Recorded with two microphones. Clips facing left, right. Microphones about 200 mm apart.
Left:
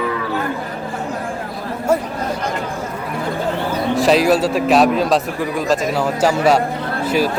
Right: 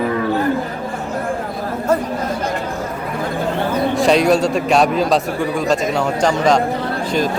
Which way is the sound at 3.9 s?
Centre (ahead or behind).